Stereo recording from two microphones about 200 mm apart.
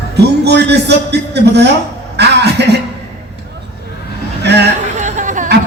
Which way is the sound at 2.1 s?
55° right (ahead or behind).